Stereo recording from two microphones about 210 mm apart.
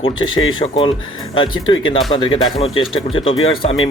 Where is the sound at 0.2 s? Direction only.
75° left (ahead or behind).